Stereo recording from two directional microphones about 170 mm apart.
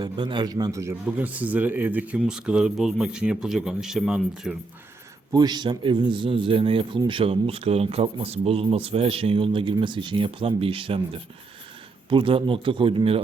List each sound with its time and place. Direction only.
0.0 s a man's voice: 25° right (ahead or behind); by 4.5 s centre (ahead or behind)
5.3 s a man's voice: 25° right (ahead or behind)